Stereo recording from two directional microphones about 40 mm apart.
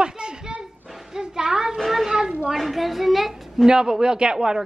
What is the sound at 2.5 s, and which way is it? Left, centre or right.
A woman's voice, centre.